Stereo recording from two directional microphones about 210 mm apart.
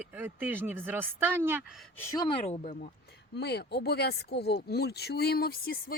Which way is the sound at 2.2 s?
30° left (ahead or behind).